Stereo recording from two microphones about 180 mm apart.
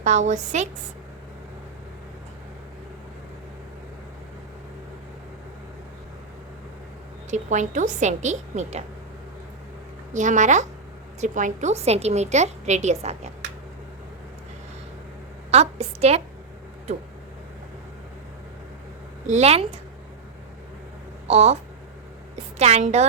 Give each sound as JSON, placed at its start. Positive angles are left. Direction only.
{"t": 0.0, "sound": "a woman's voice", "side_deg": -40}
{"t": 7.3, "sound": "a woman's voice", "side_deg": -40}
{"t": 10.1, "sound": "a woman's voice", "side_deg": -45}
{"t": 15.4, "sound": "a woman's voice", "side_deg": -35}
{"t": 19.3, "sound": "a woman's voice", "side_deg": -35}
{"t": 21.2, "sound": "a woman's voice", "side_deg": -35}